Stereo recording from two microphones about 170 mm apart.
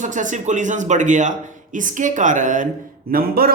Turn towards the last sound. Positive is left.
turn(degrees=-60)  # may be behind; listen again after turning